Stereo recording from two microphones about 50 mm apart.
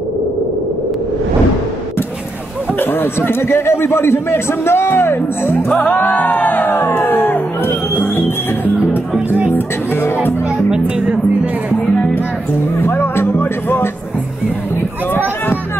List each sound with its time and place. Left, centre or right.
2.8 s a man's voice: left
5.8 s speech: left
10.7 s speech: right
12.9 s music: left
15.1 s a sound: left